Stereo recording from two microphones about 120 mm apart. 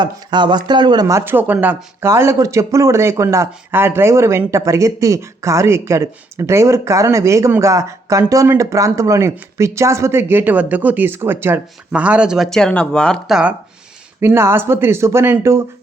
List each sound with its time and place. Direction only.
0.0 s speech: 40° right (ahead or behind); by 12.5 s 5° right (ahead or behind)
12.5 s speech: 5° left (ahead or behind)
13.2 s speech: 5° right (ahead or behind)
14.2 s speech: 20° right (ahead or behind)